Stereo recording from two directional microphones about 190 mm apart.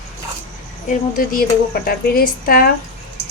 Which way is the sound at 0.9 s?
45° left (ahead or behind).